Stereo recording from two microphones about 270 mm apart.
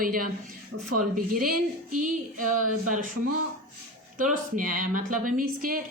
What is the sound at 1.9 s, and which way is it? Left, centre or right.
Female singing, right.